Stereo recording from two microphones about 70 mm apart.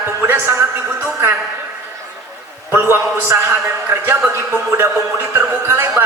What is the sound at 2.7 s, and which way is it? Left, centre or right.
A man's voice, right.